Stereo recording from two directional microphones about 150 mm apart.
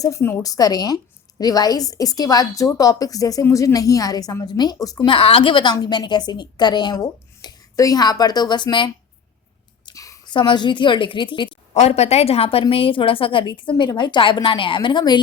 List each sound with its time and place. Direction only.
0.0 s a woman's voice: 20° left (ahead or behind)
5.1 s a woman's voice: 35° left (ahead or behind)
11.7 s a woman's voice: 45° left (ahead or behind)